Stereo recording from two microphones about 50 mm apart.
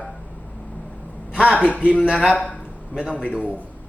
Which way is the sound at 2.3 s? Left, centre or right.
Centre.